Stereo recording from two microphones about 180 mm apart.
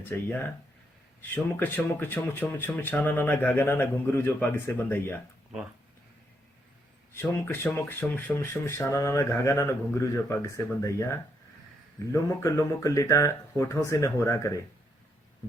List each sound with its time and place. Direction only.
0.0 s speech: 10° left (ahead or behind)
1.5 s speech: 10° left (ahead or behind)
7.2 s speech: 10° left (ahead or behind)
12.1 s speech: 15° left (ahead or behind)